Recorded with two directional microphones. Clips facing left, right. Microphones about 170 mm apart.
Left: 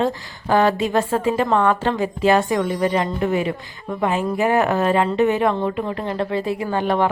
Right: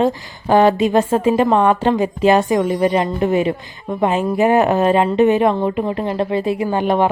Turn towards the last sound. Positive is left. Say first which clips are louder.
# right 3 dB
turn(degrees=-15)  # may be behind; listen again after turning